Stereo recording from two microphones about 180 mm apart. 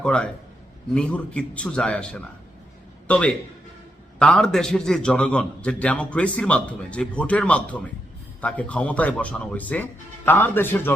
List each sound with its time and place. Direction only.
0.0 s a man's voice: 5° left (ahead or behind)